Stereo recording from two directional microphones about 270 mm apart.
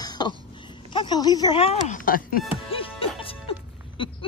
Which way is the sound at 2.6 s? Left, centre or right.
Centre.